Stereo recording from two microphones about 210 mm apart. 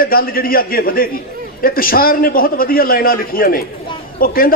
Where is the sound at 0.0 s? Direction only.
45° left (ahead or behind).